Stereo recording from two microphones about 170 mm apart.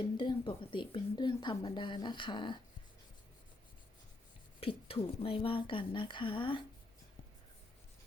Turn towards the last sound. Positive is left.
turn(degrees=30)  # may be behind; listen again after turning